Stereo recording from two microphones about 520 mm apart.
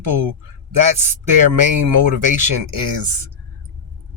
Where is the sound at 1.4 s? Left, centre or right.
Right.